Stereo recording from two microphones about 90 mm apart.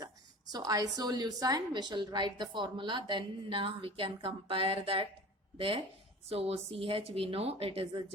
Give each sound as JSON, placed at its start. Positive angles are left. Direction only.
{"t": 0.5, "sound": "a woman's voice", "side_deg": -40}